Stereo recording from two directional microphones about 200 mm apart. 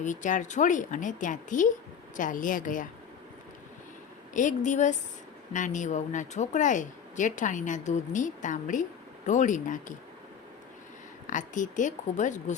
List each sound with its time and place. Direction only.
0.0 s speech: 40° left (ahead or behind)
4.4 s speech: 40° left (ahead or behind)
11.3 s speech: 40° left (ahead or behind)